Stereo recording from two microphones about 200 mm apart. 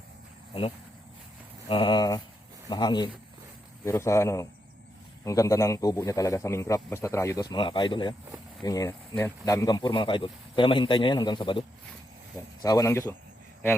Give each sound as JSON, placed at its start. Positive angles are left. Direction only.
{"t": 1.6, "sound": "speech", "side_deg": 25}
{"t": 12.6, "sound": "speech", "side_deg": 15}